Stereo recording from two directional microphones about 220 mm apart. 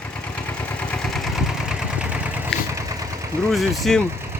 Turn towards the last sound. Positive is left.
turn(degrees=0)  # may be behind; listen again after turning